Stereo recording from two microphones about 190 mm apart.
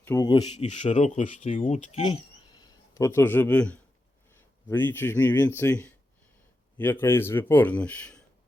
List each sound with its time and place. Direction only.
0.0 s speech: 15° left (ahead or behind)
0.4 s speech: 35° left (ahead or behind)
2.0 s speech: 20° left (ahead or behind); by 8.2 s 5° left (ahead or behind)